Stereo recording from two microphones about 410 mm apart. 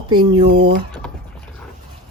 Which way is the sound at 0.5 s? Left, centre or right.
Right.